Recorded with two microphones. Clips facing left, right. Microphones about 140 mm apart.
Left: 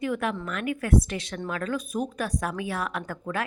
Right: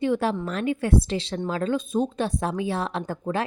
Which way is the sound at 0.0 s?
30° right (ahead or behind).